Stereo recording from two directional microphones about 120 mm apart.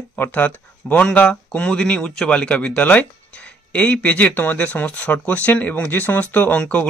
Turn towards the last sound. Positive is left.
turn(degrees=10)  # may be behind; listen again after turning